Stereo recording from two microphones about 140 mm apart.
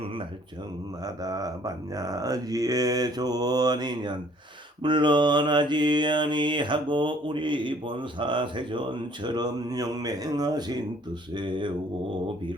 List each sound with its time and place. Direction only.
1.0 s speech: 25° right (ahead or behind)
4.8 s mantra: 35° right (ahead or behind)